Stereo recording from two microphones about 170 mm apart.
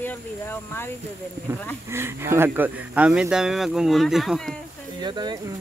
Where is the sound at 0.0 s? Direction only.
10° left (ahead or behind).